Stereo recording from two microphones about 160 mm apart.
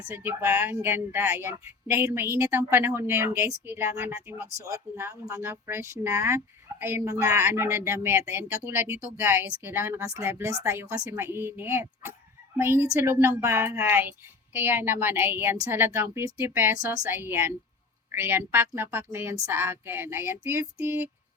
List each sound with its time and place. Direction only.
0.1 s speech: 15° right (ahead or behind)